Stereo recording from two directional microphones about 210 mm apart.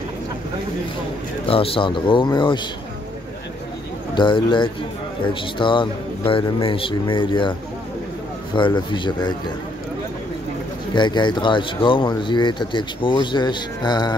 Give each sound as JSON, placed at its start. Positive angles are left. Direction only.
{"t": 1.4, "sound": "speech", "side_deg": 25}
{"t": 4.1, "sound": "speech", "side_deg": 20}
{"t": 8.5, "sound": "speech", "side_deg": 20}
{"t": 11.0, "sound": "speech", "side_deg": 20}